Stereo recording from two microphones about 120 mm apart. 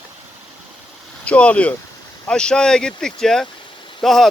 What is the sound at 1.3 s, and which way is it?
Speech, 10° left (ahead or behind).